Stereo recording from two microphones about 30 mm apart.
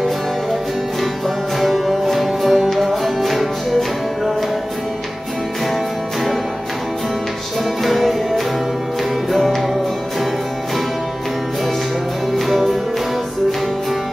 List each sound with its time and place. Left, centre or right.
1.2 s music: centre
7.8 s music: centre
12.4 s music: centre